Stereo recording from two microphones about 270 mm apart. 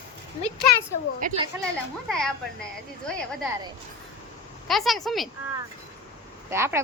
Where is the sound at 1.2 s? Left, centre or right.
Right.